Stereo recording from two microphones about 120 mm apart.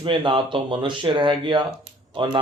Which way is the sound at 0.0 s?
45° right (ahead or behind).